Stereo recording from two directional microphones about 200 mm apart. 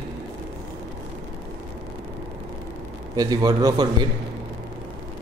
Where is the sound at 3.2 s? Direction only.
20° right (ahead or behind).